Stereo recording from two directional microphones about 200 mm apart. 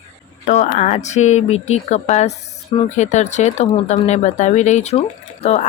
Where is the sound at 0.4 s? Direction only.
35° left (ahead or behind).